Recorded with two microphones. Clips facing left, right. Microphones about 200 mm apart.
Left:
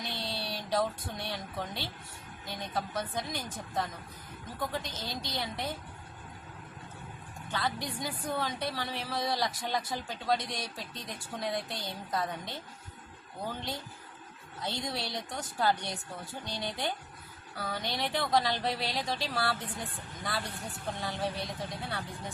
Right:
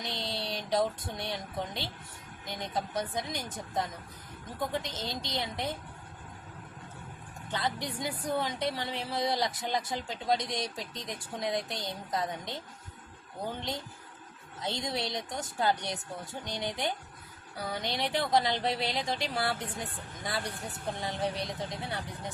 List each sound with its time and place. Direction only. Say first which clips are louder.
0.0 s speech: right 1 dB; 20° right (ahead or behind)
7.5 s speech: right 1 dB; 20° right (ahead or behind)